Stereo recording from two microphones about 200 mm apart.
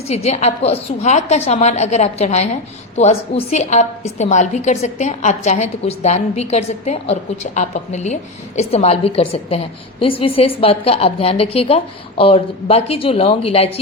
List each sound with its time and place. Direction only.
0.1 s a woman's voice: 35° left (ahead or behind)